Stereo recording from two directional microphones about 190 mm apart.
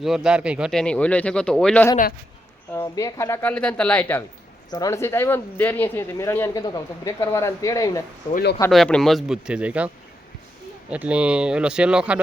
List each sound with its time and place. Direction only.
0.0 s speech: centre (ahead or behind)
2.7 s speech: 15° left (ahead or behind)
8.7 s speech: centre (ahead or behind)